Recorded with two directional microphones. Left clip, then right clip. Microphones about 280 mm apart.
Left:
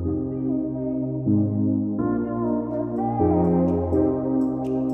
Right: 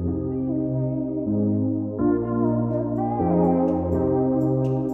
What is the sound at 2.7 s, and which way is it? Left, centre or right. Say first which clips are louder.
Music: right 1 dB; centre.